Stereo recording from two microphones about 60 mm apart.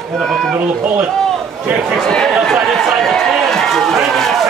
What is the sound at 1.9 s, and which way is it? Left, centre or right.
Speech, centre.